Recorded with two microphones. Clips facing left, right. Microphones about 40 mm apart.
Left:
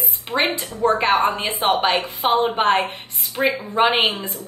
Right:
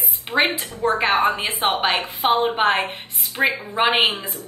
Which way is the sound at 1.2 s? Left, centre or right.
Right.